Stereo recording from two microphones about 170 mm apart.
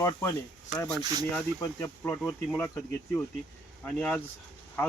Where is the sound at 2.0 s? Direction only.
10° left (ahead or behind).